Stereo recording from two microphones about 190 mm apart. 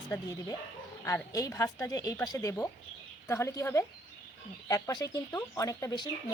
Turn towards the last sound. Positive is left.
turn(degrees=20)  # may be behind; listen again after turning